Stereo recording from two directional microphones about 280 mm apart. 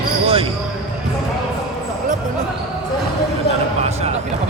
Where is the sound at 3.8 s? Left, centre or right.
Right.